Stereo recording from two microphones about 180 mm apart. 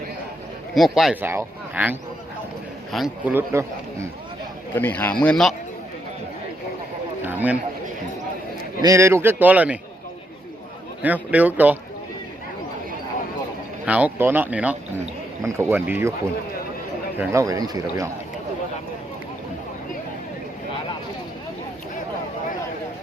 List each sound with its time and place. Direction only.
0.7 s a man's voice: centre (ahead or behind)
4.7 s speech: 10° left (ahead or behind)
7.2 s a sound: 10° right (ahead or behind)
8.8 s a man's voice: 15° right (ahead or behind)
11.0 s a man's voice: 10° right (ahead or behind)
13.8 s a man's voice: 10° right (ahead or behind)
17.2 s speech: 15° right (ahead or behind)